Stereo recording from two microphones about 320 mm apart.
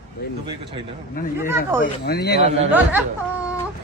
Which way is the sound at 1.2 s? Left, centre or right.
Left.